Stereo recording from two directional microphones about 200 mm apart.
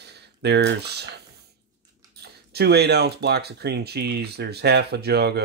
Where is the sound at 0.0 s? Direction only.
55° right (ahead or behind).